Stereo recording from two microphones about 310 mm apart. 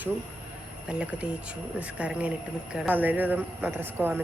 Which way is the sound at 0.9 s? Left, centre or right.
Centre.